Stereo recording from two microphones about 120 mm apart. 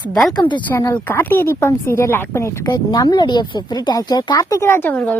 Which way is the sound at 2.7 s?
35° left (ahead or behind).